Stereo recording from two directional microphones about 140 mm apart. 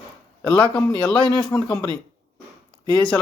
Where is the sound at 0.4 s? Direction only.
10° left (ahead or behind).